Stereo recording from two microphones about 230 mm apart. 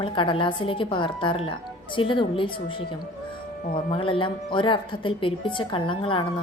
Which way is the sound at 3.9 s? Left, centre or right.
Left.